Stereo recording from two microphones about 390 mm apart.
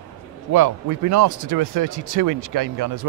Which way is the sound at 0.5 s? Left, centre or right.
Right.